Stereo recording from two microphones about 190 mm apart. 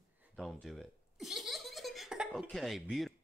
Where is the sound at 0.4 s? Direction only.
Centre (ahead or behind).